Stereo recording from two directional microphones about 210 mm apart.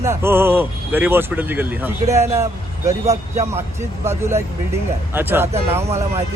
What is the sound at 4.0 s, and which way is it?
Speech, 10° right (ahead or behind).